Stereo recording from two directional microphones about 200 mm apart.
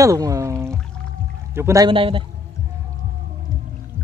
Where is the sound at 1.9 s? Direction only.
25° right (ahead or behind).